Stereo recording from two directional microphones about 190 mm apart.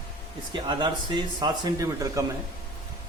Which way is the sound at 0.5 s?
25° right (ahead or behind).